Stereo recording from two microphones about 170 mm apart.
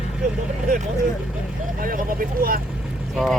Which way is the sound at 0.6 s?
45° right (ahead or behind).